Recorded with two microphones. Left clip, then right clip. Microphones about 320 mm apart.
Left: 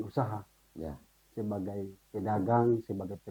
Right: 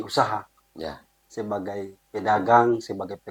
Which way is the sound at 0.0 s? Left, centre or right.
Centre.